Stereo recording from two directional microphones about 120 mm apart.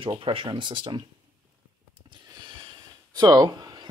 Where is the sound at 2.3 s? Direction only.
35° right (ahead or behind).